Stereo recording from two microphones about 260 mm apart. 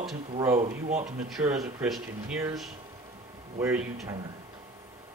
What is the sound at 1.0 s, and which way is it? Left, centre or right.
Speech, centre.